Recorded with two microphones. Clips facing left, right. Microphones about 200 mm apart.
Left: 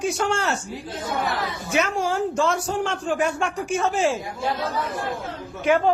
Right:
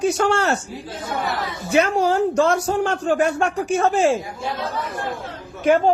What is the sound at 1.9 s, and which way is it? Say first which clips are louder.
Speech: right 5 dB; 35° right (ahead or behind).